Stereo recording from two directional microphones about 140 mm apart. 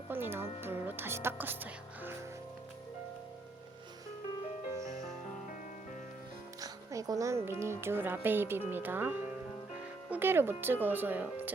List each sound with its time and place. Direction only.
0.1 s speech: 15° right (ahead or behind)
6.6 s speech: 25° right (ahead or behind)